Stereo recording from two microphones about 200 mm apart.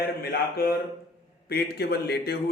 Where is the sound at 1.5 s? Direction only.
55° left (ahead or behind).